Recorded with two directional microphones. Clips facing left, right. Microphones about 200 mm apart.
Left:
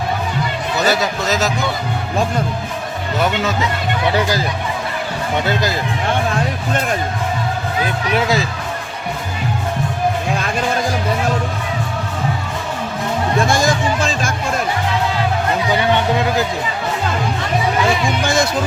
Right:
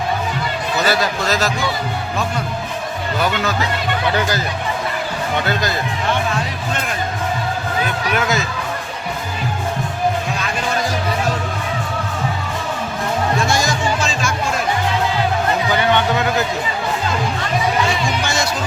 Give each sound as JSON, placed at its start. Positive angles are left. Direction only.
{"t": 0.9, "sound": "a man's voice", "side_deg": 20}
{"t": 3.2, "sound": "a man's voice", "side_deg": 25}
{"t": 8.1, "sound": "speech", "side_deg": 30}
{"t": 13.5, "sound": "music", "side_deg": 55}
{"t": 18.2, "sound": "music", "side_deg": 55}